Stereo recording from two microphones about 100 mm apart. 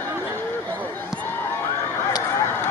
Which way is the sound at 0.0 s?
25° right (ahead or behind).